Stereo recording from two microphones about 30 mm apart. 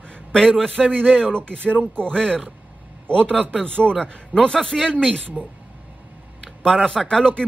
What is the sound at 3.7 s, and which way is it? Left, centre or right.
Speech, left.